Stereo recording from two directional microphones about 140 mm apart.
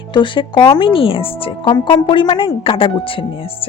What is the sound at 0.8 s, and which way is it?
Speech, 40° left (ahead or behind).